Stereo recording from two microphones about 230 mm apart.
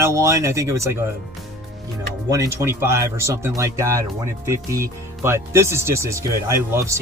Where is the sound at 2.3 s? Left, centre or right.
Centre.